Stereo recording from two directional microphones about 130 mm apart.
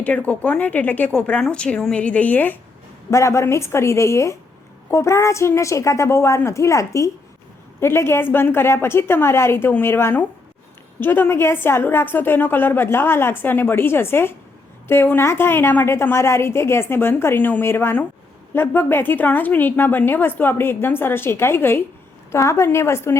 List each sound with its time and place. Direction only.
0.0 s a woman's voice: 10° left (ahead or behind)